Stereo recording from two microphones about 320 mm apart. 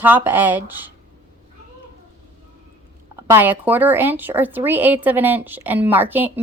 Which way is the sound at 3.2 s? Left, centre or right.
Centre.